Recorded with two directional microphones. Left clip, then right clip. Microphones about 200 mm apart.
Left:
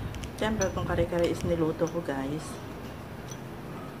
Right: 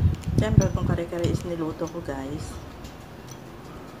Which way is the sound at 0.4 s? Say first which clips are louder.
Right 3 dB; centre (ahead or behind).